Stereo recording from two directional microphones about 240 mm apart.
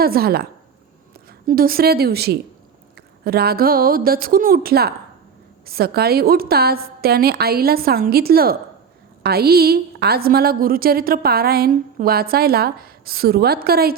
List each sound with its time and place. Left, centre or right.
0.0 s a woman's voice: right
1.5 s a woman's voice: right